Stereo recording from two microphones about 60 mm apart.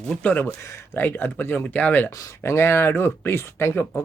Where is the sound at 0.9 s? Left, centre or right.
Left.